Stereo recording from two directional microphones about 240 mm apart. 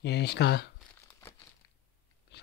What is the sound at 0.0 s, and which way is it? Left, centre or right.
Speech, left.